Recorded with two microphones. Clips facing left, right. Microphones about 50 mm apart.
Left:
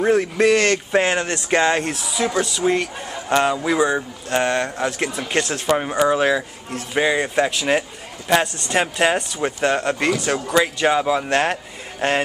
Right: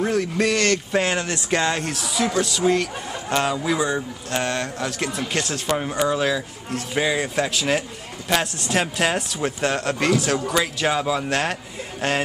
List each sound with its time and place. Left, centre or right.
0.0 s speech: left; by 1.5 s centre
1.5 s speech: centre
2.0 s speech: centre; by 6.4 s left
6.7 s speech: centre